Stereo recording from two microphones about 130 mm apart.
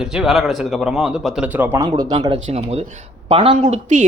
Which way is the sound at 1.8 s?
30° right (ahead or behind).